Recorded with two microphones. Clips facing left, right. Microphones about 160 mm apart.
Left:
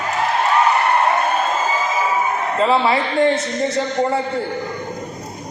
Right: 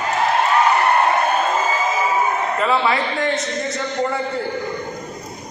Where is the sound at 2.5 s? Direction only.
25° left (ahead or behind).